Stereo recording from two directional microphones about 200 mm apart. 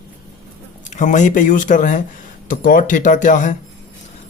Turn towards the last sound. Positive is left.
turn(degrees=40)  # may be behind; listen again after turning